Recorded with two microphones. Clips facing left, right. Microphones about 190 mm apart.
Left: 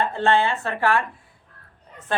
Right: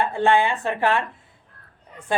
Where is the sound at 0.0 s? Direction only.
15° right (ahead or behind).